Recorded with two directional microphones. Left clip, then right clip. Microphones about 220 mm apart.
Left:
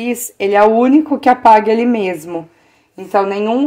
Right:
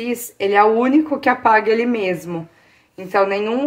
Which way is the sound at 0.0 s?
40° left (ahead or behind).